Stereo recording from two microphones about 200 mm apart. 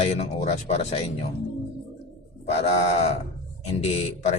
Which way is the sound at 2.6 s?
30° left (ahead or behind).